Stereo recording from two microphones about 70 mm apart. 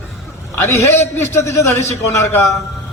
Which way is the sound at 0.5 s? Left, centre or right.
Left.